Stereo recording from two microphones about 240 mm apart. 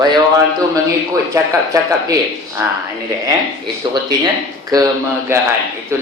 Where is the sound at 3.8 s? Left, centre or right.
Centre.